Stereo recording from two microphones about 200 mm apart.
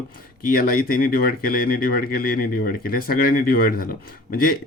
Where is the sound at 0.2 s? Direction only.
45° left (ahead or behind).